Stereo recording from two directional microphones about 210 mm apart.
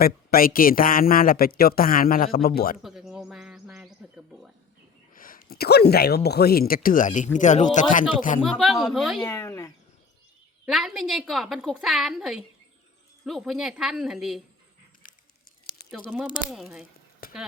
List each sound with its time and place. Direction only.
0.0 s a man's voice: 45° left (ahead or behind)
2.8 s bird: centre (ahead or behind)
5.1 s speech: 40° left (ahead or behind)
8.4 s a woman's voice: centre (ahead or behind)
9.2 s speech: 15° left (ahead or behind)
10.7 s a woman's voice: centre (ahead or behind)
15.9 s a woman's voice: 5° right (ahead or behind)
17.2 s a sound: 45° left (ahead or behind)